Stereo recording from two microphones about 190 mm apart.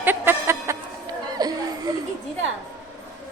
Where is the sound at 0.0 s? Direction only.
10° right (ahead or behind).